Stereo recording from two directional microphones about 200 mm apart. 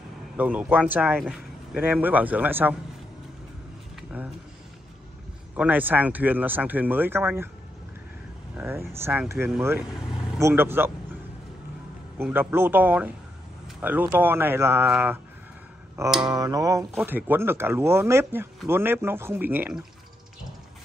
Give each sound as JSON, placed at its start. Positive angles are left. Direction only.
{"t": 0.4, "sound": "speech", "side_deg": -5}
{"t": 3.9, "sound": "a sound", "side_deg": -5}
{"t": 5.6, "sound": "speech", "side_deg": -10}
{"t": 8.5, "sound": "speech", "side_deg": -10}
{"t": 12.2, "sound": "speech", "side_deg": -10}
{"t": 16.3, "sound": "speech", "side_deg": -20}